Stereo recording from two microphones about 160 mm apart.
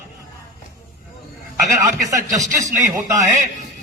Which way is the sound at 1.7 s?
20° right (ahead or behind).